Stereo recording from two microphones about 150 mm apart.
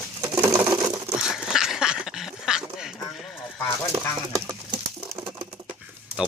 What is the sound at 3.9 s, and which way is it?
Speech, 20° right (ahead or behind).